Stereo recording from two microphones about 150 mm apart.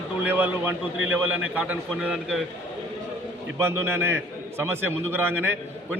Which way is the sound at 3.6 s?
15° right (ahead or behind).